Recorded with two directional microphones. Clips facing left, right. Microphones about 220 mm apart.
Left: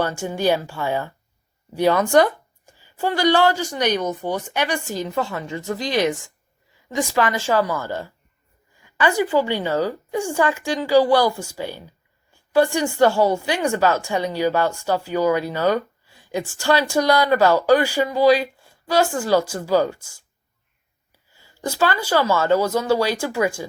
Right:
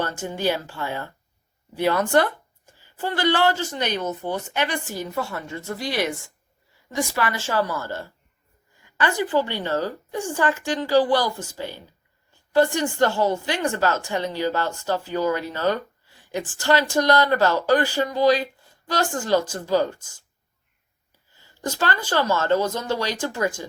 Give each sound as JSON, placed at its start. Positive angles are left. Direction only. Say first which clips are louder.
{"t": 0.0, "sound": "speech", "louder": "left 4 dB", "side_deg": 10}
{"t": 21.3, "sound": "speech", "louder": "left 3 dB", "side_deg": 10}